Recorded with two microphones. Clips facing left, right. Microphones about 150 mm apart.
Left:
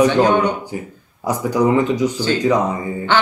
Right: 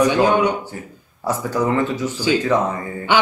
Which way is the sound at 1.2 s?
15° left (ahead or behind).